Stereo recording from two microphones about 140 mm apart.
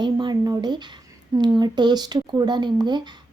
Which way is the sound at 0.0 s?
30° right (ahead or behind).